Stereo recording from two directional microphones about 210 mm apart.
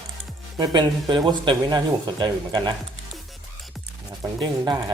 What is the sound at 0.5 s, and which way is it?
Speech, 20° right (ahead or behind).